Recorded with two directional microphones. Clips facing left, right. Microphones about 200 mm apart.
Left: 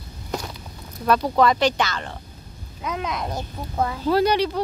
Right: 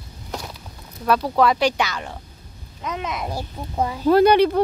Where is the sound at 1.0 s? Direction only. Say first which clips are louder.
Even; 5° right (ahead or behind).